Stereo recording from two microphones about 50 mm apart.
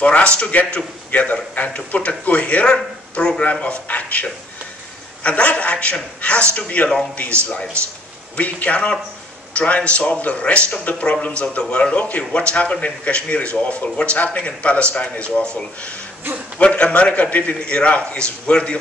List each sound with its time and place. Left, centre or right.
0.0 s a man's voice: left
8.4 s a man's voice: left